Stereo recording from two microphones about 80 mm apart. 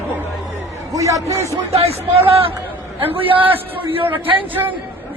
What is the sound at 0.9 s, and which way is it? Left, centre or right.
Speech, right.